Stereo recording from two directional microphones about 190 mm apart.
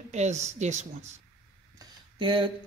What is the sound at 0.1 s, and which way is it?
Speech, 35° right (ahead or behind).